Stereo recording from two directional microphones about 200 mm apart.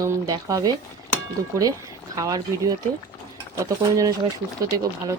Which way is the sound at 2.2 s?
15° right (ahead or behind).